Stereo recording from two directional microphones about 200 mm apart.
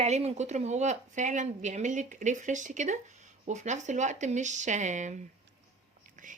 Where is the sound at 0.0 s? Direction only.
30° right (ahead or behind).